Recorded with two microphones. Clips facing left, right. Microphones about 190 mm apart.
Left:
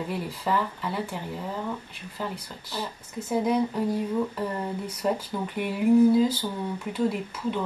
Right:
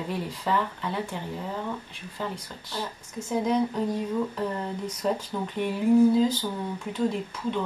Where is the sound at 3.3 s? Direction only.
10° left (ahead or behind).